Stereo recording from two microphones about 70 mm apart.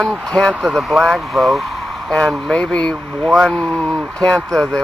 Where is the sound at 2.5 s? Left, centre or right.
Centre.